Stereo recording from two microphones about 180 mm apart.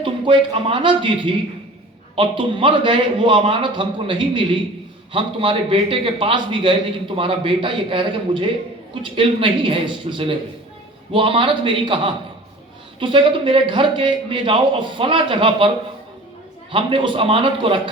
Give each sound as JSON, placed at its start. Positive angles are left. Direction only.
{"t": 0.0, "sound": "a man's voice", "side_deg": -30}
{"t": 16.7, "sound": "a man's voice", "side_deg": -30}